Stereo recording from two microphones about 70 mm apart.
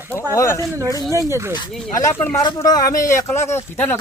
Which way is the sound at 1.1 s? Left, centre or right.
Right.